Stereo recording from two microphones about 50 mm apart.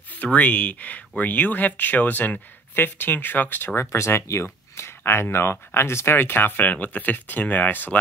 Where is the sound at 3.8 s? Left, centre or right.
Left.